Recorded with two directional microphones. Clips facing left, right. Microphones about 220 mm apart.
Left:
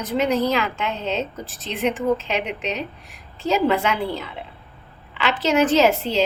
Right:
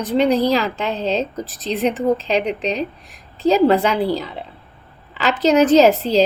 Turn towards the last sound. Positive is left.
turn(degrees=-35)  # may be behind; listen again after turning